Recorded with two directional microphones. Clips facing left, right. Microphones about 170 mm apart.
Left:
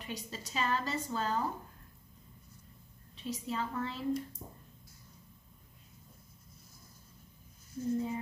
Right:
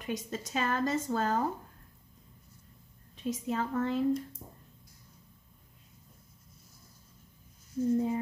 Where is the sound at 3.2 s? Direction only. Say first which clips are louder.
Right 4 dB; 50° right (ahead or behind).